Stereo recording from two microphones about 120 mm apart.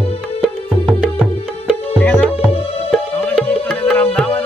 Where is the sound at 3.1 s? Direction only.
15° left (ahead or behind).